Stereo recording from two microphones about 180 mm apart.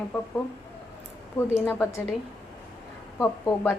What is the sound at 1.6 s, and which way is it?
Speech, 15° left (ahead or behind).